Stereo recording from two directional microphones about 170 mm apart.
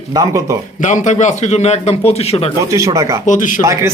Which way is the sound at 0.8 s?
45° left (ahead or behind).